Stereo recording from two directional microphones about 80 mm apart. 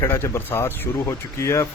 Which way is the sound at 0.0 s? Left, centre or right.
Left.